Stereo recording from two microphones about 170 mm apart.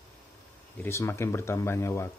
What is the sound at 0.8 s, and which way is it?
Speech, 15° left (ahead or behind).